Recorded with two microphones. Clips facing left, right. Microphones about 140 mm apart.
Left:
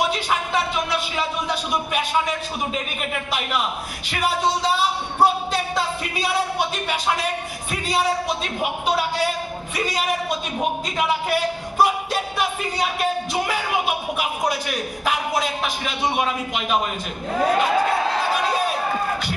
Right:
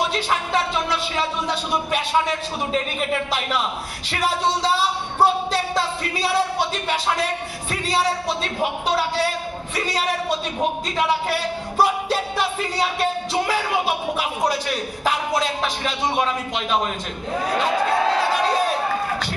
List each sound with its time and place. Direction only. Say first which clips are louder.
0.7 s music: right 1 dB; 10° left (ahead or behind)
4.1 s a man's voice: even; 30° right (ahead or behind)
5.2 s a sound: even; 10° left (ahead or behind)
6.1 s a man's voice: right 2 dB; 30° right (ahead or behind)
8.4 s speech: right 1 dB; 10° left (ahead or behind)
10.0 s a man's voice: right 1 dB; 30° right (ahead or behind)
11.2 s music: left 1 dB; 30° right (ahead or behind)
13.3 s a man's voice: right 1 dB; 30° right (ahead or behind)
15.4 s speech: right 2 dB; 10° left (ahead or behind)